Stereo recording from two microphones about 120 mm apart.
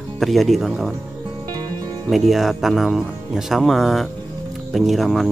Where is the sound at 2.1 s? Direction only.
Centre (ahead or behind).